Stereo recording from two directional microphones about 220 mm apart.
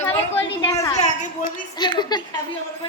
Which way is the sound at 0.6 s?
20° left (ahead or behind).